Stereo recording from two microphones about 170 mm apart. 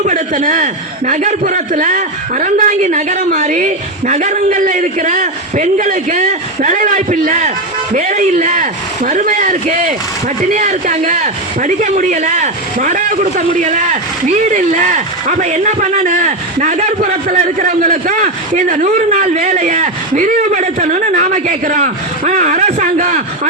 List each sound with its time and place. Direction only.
0.0 s a man's voice: 50° right (ahead or behind)